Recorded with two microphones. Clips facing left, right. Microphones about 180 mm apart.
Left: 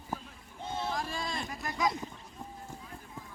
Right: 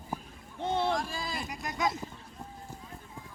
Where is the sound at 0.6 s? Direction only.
70° right (ahead or behind).